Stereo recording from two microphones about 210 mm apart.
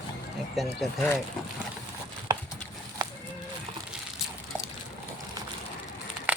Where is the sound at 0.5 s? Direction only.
Centre (ahead or behind).